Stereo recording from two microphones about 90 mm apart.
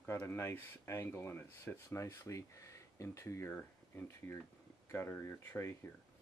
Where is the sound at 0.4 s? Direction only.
30° left (ahead or behind).